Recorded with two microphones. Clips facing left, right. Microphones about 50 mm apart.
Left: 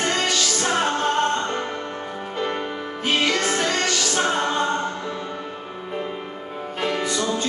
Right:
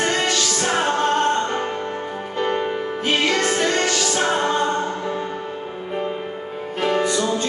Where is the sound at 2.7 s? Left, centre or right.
Centre.